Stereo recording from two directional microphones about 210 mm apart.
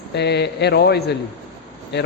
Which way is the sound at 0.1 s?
55° left (ahead or behind).